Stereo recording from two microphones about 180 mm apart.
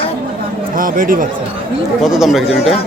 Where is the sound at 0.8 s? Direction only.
50° right (ahead or behind).